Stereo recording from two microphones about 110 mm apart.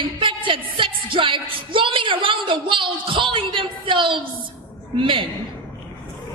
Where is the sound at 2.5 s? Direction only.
50° right (ahead or behind).